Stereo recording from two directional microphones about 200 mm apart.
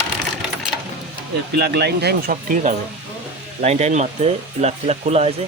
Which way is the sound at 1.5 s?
55° right (ahead or behind).